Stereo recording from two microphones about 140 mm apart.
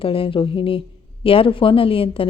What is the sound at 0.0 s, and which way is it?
A woman's voice, 40° left (ahead or behind).